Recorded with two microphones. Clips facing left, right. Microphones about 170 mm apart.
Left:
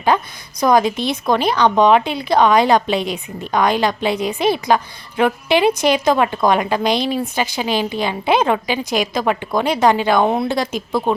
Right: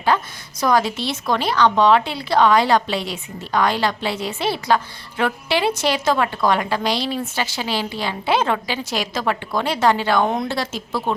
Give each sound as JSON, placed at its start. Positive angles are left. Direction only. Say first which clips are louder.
{"t": 0.1, "sound": "a woman's voice", "louder": "left 2 dB", "side_deg": 15}